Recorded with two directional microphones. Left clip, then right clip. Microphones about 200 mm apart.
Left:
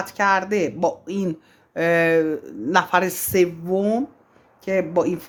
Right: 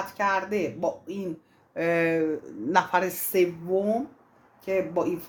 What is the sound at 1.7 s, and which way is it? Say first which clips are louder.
A woman's voice: left 7 dB; 35° left (ahead or behind).